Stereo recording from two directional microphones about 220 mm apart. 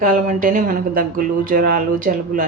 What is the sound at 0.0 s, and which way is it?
Speech, 40° right (ahead or behind).